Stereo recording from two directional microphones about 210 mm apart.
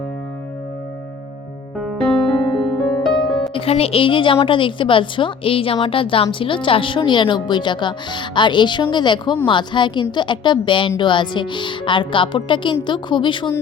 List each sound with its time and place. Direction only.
2.6 s music: centre (ahead or behind)
3.5 s a woman's voice: 30° left (ahead or behind)